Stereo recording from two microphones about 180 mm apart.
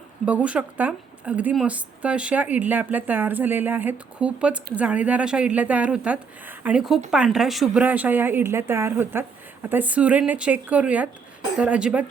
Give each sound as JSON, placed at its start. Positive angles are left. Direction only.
{"t": 0.3, "sound": "a woman's voice", "side_deg": -5}